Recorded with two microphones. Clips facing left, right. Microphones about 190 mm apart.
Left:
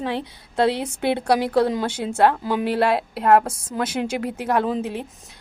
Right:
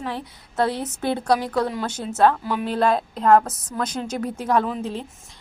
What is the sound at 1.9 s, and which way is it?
A woman's voice, 10° left (ahead or behind).